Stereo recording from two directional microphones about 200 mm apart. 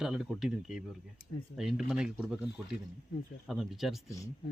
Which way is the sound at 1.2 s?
50° left (ahead or behind).